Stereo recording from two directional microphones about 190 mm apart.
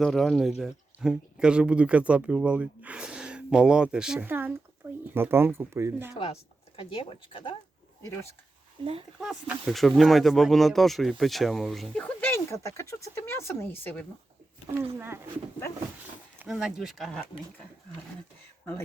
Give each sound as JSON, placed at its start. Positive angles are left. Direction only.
{"t": 0.0, "sound": "speech", "side_deg": 0}
{"t": 6.7, "sound": "speech", "side_deg": 30}
{"t": 8.8, "sound": "speech", "side_deg": -30}
{"t": 9.2, "sound": "speech", "side_deg": -5}
{"t": 14.9, "sound": "speech", "side_deg": -10}
{"t": 16.4, "sound": "speech", "side_deg": -5}